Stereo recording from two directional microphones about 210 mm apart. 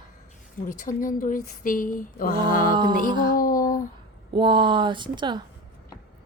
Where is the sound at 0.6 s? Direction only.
40° left (ahead or behind).